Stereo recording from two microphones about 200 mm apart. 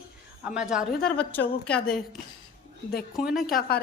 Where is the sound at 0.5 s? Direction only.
5° right (ahead or behind).